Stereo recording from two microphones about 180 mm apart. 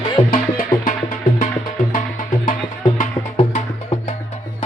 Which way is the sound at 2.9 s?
40° left (ahead or behind).